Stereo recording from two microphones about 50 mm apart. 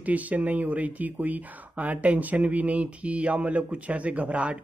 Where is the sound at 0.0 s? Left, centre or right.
Right.